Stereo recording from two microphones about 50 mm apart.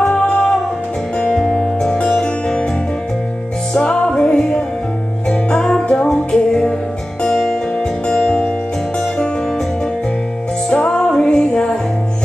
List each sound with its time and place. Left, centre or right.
0.1 s music: left
3.7 s music: centre
10.7 s music: centre